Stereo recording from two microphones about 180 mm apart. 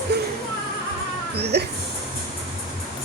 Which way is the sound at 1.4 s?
65° right (ahead or behind).